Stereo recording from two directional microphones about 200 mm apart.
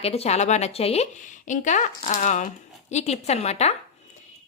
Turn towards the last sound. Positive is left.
turn(degrees=35)  # may be behind; listen again after turning